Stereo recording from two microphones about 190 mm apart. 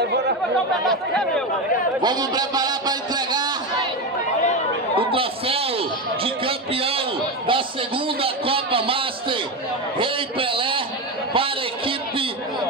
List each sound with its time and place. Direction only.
0.8 s speech: centre (ahead or behind)
2.0 s a man's voice: 20° right (ahead or behind)
4.9 s a man's voice: 30° right (ahead or behind)
9.9 s a sound: 25° right (ahead or behind)